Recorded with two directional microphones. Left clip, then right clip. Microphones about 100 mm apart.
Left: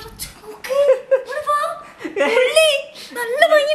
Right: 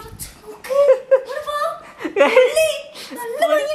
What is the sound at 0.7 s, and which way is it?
Chuckle, 15° right (ahead or behind).